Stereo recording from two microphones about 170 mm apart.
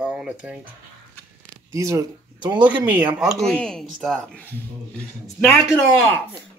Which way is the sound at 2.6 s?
10° right (ahead or behind).